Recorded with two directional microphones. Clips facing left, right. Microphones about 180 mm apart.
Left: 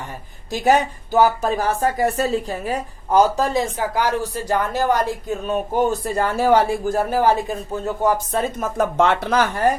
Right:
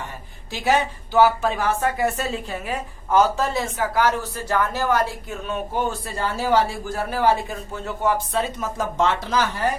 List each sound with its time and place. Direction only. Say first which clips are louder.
0.5 s speech: left 4 dB; 45° left (ahead or behind)
3.9 s speech: even; 15° left (ahead or behind)
5.5 s speech: left 5 dB; 45° left (ahead or behind)